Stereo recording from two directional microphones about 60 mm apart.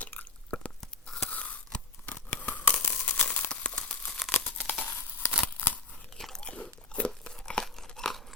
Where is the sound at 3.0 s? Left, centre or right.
Left.